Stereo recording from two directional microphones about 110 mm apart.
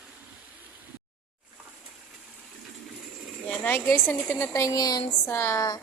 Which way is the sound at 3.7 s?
25° left (ahead or behind).